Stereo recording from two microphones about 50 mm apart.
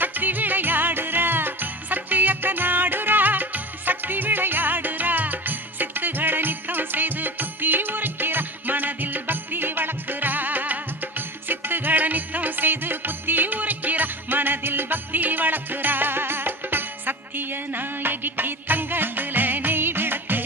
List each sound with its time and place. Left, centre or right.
0.0 s music: right